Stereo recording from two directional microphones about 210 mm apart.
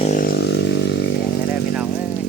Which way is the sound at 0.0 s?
40° left (ahead or behind).